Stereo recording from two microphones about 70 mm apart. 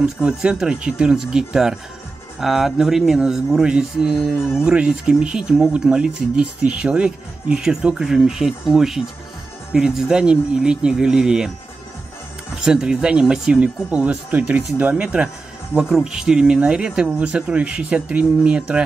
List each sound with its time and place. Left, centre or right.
0.0 s speech: centre
12.5 s speech: centre